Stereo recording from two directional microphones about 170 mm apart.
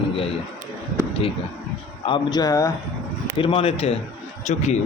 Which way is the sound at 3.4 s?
35° left (ahead or behind).